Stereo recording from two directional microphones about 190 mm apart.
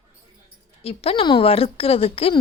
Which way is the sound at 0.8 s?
30° left (ahead or behind).